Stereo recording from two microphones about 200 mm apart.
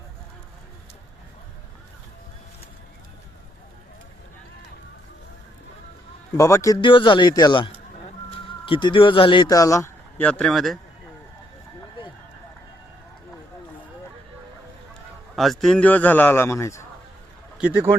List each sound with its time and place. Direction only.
6.3 s a man's voice: 15° left (ahead or behind)
15.4 s a man's voice: centre (ahead or behind)